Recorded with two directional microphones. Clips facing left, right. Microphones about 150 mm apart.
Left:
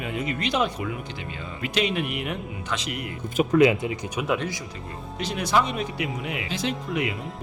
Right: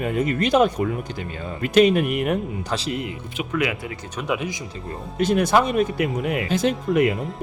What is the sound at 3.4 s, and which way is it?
Speech, 40° left (ahead or behind).